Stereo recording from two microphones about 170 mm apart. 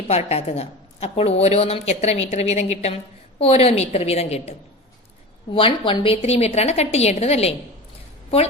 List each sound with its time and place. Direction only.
0.1 s a woman's voice: 40° left (ahead or behind)
5.5 s a woman's voice: 30° left (ahead or behind)